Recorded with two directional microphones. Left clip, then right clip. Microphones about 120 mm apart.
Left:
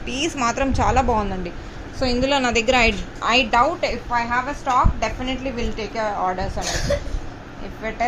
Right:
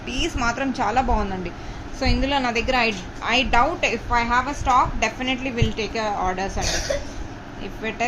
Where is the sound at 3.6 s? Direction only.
Centre (ahead or behind).